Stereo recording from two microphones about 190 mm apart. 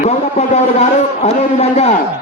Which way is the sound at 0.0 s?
35° left (ahead or behind).